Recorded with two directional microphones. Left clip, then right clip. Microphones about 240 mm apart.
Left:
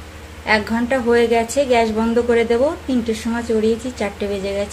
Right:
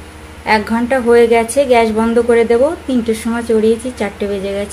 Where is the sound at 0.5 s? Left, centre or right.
Centre.